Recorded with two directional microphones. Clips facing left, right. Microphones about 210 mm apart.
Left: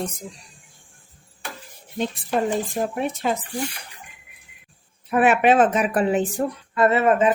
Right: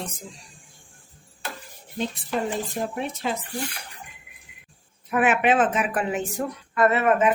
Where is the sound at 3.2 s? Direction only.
50° left (ahead or behind).